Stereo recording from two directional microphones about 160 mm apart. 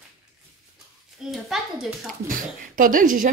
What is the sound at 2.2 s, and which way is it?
A woman's voice, 60° right (ahead or behind).